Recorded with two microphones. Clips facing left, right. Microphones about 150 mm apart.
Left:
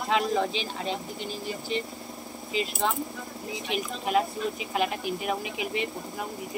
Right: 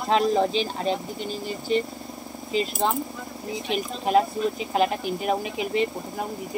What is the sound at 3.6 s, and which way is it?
Speech, 35° right (ahead or behind).